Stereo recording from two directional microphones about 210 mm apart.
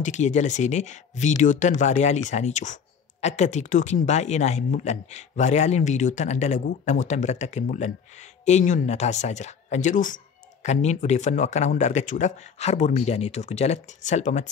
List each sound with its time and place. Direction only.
0.0 s speech: 35° left (ahead or behind)